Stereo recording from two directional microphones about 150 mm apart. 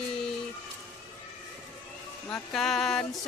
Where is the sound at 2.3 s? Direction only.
Centre (ahead or behind).